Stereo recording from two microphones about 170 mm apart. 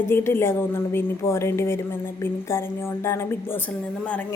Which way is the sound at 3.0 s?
15° left (ahead or behind).